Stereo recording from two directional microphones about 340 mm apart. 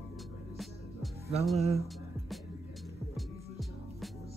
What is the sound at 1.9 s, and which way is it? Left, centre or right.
Music, centre.